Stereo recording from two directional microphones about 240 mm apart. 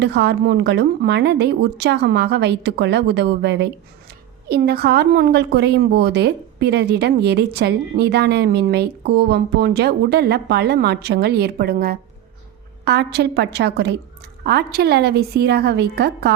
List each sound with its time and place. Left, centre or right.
0.0 s a woman's voice: right